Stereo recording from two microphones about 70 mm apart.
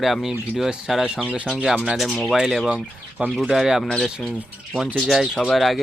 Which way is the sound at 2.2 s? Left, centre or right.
Centre.